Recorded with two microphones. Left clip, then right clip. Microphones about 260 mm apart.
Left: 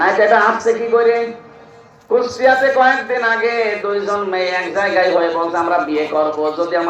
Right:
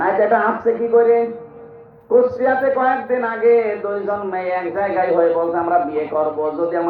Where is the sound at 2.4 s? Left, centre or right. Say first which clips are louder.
Left 5 dB; left.